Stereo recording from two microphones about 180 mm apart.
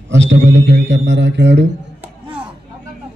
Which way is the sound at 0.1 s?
85° right.